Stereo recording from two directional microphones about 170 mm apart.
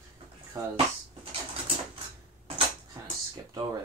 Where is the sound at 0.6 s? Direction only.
20° right (ahead or behind).